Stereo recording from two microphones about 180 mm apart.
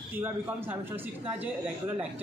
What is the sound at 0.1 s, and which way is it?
Speech, 10° right (ahead or behind).